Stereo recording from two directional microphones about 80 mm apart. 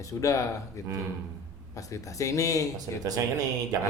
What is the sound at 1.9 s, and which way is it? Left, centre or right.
Speech, left.